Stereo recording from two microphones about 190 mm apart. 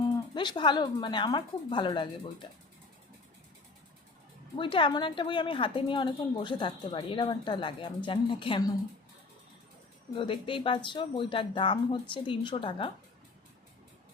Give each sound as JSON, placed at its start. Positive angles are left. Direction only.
{"t": 0.3, "sound": "a woman's voice", "side_deg": 25}
{"t": 4.5, "sound": "a woman's voice", "side_deg": 25}
{"t": 10.2, "sound": "a woman's voice", "side_deg": 25}